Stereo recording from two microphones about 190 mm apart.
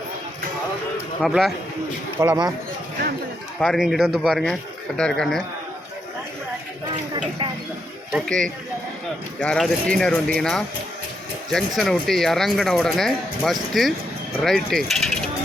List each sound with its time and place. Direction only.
1.2 s speech: centre (ahead or behind)
2.1 s speech: 15° right (ahead or behind)
3.6 s speech: centre (ahead or behind)
7.1 s speech: 25° right (ahead or behind)
8.2 s speech: 5° left (ahead or behind)